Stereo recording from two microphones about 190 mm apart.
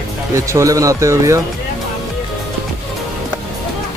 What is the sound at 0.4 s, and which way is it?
Speech, 15° right (ahead or behind).